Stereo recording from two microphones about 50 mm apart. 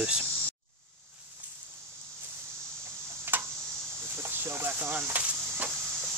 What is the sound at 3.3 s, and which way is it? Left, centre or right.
Tick-tock, right.